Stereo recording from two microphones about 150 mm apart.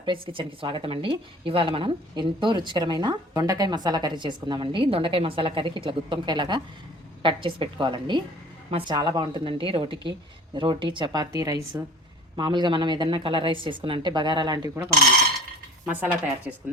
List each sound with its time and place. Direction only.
0.0 s a woman's voice: 35° right (ahead or behind)
16.0 s a woman's voice: 10° right (ahead or behind)